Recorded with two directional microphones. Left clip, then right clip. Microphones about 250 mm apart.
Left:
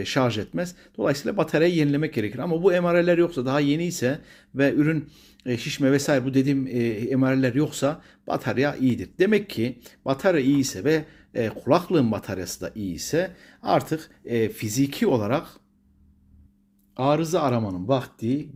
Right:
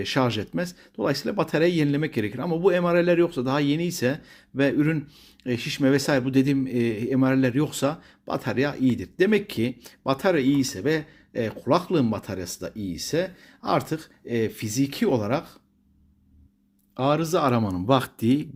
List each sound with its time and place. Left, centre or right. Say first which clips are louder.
0.0 s speech: left 1 dB; centre
17.0 s speech: even; centre; by 18.4 s right